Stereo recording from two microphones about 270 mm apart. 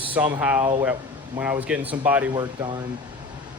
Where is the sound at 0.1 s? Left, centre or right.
Centre.